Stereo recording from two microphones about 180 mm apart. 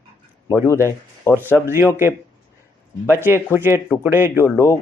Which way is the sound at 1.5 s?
15° right (ahead or behind).